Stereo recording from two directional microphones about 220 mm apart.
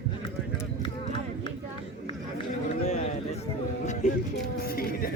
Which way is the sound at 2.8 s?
30° left (ahead or behind).